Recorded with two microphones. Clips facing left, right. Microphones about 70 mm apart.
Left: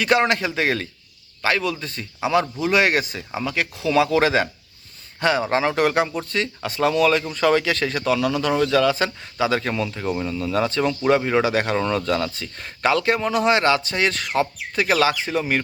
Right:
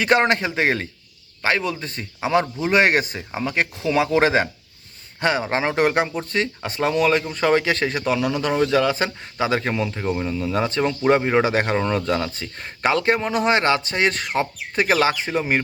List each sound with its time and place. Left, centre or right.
0.0 s a man's voice: right